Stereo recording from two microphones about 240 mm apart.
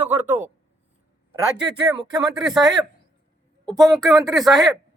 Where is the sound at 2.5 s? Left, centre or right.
Centre.